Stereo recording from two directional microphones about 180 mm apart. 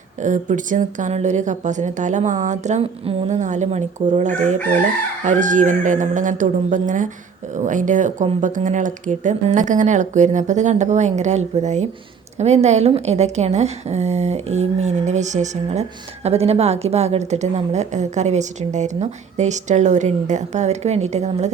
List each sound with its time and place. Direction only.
0.2 s a woman's voice: 45° right (ahead or behind)